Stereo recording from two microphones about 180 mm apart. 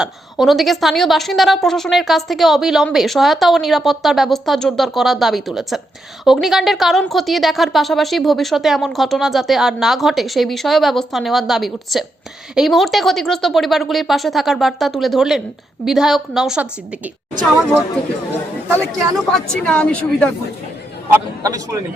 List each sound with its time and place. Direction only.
0.0 s a woman's voice: centre (ahead or behind)
18.7 s speech: 20° right (ahead or behind)
19.3 s a woman's voice: 5° left (ahead or behind)
21.1 s a man's voice: 20° right (ahead or behind)